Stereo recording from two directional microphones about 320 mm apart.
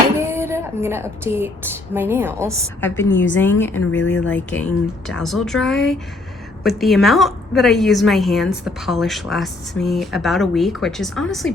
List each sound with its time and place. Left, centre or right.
0.2 s a sound: centre
1.2 s speech: centre
3.0 s a woman's voice: centre
3.9 s speech: left
4.3 s a woman's voice: centre